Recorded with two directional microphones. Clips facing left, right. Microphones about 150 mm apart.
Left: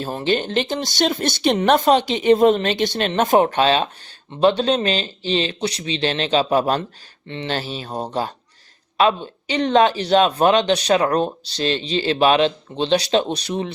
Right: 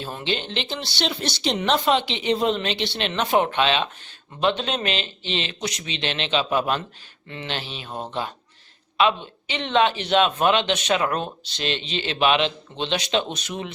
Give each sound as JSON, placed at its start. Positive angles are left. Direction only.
{"t": 0.0, "sound": "speech", "side_deg": 40}